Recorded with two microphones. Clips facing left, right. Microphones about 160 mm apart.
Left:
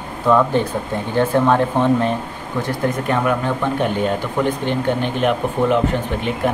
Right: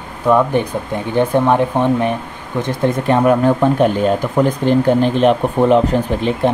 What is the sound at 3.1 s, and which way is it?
Speech, 35° right (ahead or behind).